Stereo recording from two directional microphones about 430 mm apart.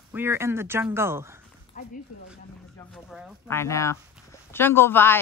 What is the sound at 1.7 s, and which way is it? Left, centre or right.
Dog, centre.